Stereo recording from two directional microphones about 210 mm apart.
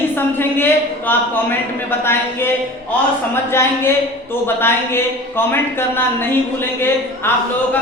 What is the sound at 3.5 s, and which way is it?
Speech, 10° left (ahead or behind).